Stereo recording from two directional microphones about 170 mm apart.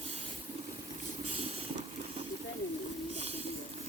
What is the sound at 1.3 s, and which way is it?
Vehicle, 35° right (ahead or behind).